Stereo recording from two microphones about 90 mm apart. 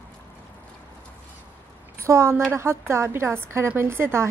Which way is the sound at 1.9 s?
30° right (ahead or behind).